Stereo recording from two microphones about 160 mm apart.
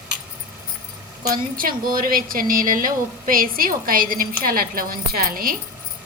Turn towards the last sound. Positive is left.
turn(degrees=-65)  # may be behind; listen again after turning